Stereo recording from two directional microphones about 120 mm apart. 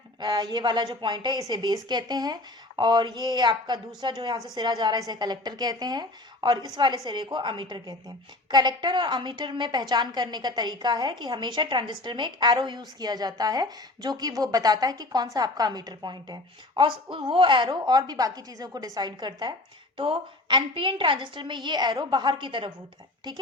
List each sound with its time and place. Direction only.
0.2 s a woman's voice: 40° right (ahead or behind)